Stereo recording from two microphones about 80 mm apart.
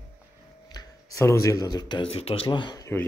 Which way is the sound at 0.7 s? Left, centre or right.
Left.